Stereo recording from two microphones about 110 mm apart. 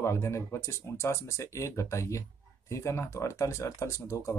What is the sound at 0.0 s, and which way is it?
Speech, 25° left (ahead or behind).